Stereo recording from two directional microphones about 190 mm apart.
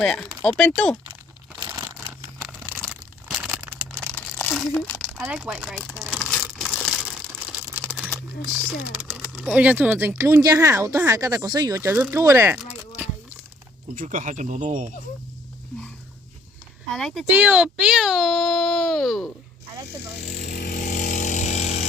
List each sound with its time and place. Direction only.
0.0 s speech: 5° left (ahead or behind)
2.9 s a sound: 5° right (ahead or behind)
4.1 s crumpling: 10° left (ahead or behind)
4.9 s speech: 5° left (ahead or behind)
6.1 s crumpling: centre (ahead or behind)
9.0 s speech: 5° right (ahead or behind)
13.9 s speech: 45° right (ahead or behind)
16.9 s speech: centre (ahead or behind)
17.2 s speech: 10° right (ahead or behind)
20.1 s vehicle: 60° left (ahead or behind); by 21.8 s 35° left (ahead or behind)